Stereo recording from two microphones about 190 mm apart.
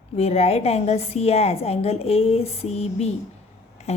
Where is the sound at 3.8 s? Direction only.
35° left (ahead or behind).